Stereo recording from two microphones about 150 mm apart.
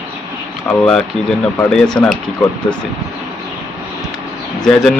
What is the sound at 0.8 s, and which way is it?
Speech, 5° left (ahead or behind).